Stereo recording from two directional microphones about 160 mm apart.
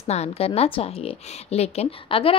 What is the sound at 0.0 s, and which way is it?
A woman's voice, 40° left (ahead or behind).